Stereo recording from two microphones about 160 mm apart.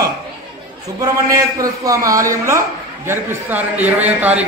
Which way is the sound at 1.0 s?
20° right (ahead or behind).